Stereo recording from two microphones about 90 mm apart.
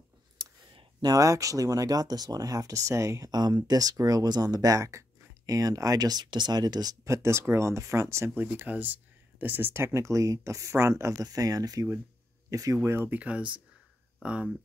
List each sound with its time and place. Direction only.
1.0 s speech: 40° right (ahead or behind)
3.3 s speech: 50° right (ahead or behind); by 8.5 s 30° right (ahead or behind)
8.5 s speech: 20° right (ahead or behind)
13.2 s speech: 15° right (ahead or behind)